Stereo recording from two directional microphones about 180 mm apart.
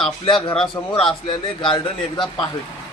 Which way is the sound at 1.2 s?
30° left (ahead or behind).